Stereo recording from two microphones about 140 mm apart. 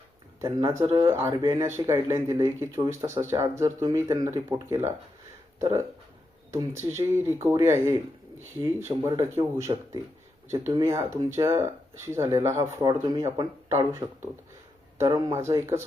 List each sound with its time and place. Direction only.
0.4 s speech: 25° right (ahead or behind)